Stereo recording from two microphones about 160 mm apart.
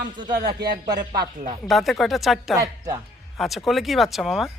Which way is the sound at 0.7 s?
75° right (ahead or behind).